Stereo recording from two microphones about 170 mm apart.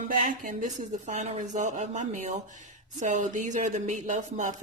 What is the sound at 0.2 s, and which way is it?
A woman's voice, 50° right (ahead or behind).